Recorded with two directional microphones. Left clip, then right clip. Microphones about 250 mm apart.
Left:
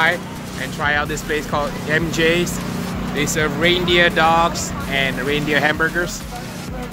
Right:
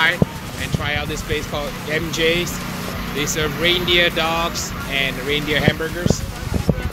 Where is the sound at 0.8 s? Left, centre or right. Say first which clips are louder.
Left 5 dB; left.